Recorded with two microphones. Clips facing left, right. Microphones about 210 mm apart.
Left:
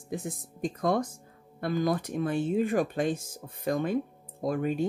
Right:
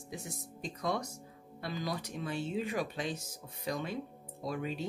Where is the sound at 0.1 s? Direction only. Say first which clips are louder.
Left 9 dB; 55° left (ahead or behind).